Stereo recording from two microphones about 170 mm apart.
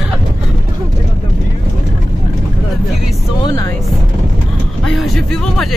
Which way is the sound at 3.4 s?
20° left (ahead or behind).